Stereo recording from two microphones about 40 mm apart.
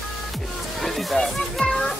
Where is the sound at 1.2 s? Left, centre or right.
Left.